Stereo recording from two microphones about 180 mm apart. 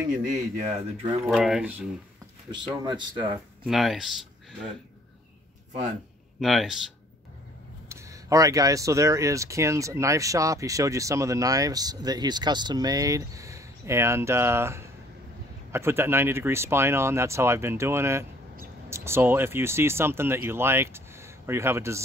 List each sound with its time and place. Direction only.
0.3 s speech: 40° right (ahead or behind)
1.3 s speech: centre (ahead or behind)
2.5 s speech: 25° right (ahead or behind)
3.6 s speech: centre (ahead or behind)
6.4 s speech: centre (ahead or behind)
7.9 s speech: 15° right (ahead or behind)